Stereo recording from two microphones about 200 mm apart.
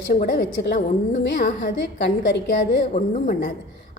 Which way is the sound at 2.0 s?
60° left (ahead or behind).